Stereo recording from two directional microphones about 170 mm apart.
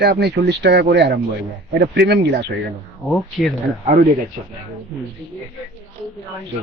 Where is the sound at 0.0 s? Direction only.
70° right (ahead or behind).